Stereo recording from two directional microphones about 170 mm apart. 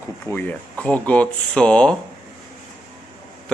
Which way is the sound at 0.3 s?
10° left (ahead or behind).